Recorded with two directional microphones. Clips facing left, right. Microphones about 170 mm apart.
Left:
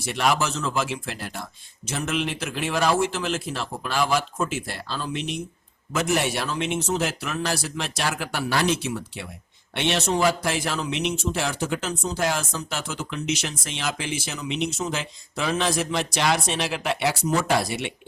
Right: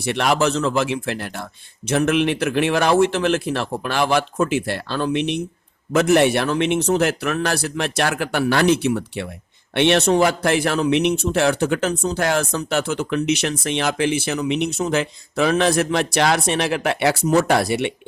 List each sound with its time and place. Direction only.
0.0 s speech: 65° right (ahead or behind)